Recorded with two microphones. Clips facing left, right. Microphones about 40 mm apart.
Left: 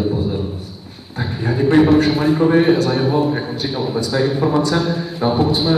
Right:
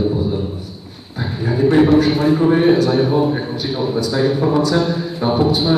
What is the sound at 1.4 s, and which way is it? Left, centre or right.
Speech, left.